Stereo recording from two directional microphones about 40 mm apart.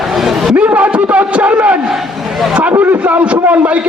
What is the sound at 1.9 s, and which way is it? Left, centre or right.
Speech, centre.